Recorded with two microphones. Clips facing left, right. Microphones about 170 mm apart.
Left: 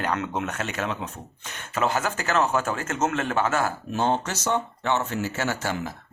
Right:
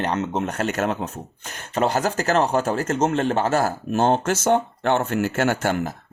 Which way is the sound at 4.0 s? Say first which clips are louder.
Right 5 dB; 50° right (ahead or behind).